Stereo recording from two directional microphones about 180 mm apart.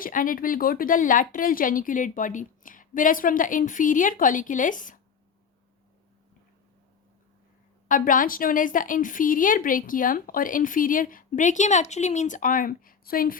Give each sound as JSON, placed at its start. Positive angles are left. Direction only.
{"t": 0.0, "sound": "speech", "side_deg": 50}
{"t": 7.9, "sound": "speech", "side_deg": 50}